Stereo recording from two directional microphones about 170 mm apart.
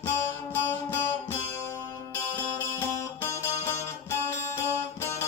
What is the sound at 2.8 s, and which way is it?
Music, 15° left (ahead or behind).